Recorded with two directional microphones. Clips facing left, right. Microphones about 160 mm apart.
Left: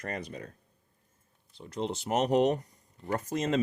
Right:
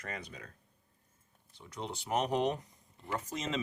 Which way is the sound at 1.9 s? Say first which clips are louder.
Left 5 dB; 80° left.